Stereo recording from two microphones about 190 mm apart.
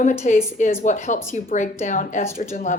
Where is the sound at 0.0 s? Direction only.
40° left (ahead or behind).